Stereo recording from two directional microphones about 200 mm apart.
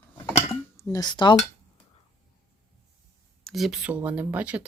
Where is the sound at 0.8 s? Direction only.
15° left (ahead or behind).